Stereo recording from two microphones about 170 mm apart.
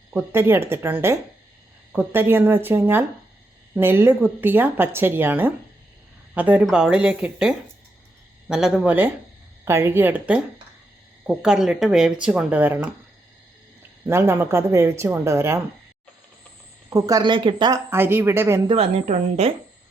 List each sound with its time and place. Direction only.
0.1 s speech: 15° right (ahead or behind)
14.1 s speech: 15° right (ahead or behind)
16.9 s speech: 20° right (ahead or behind)
18.7 s a woman's voice: 35° right (ahead or behind)